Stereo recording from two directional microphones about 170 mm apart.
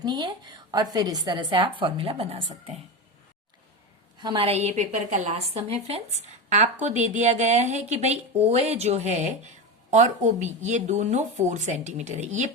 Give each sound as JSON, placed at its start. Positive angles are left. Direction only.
{"t": 0.0, "sound": "a woman's voice", "side_deg": -25}
{"t": 4.2, "sound": "a woman's voice", "side_deg": -30}